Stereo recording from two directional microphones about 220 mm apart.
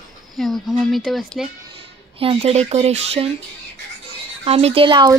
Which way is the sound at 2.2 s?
25° right (ahead or behind).